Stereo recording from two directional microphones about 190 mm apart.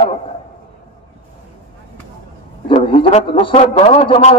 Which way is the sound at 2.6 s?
30° left (ahead or behind).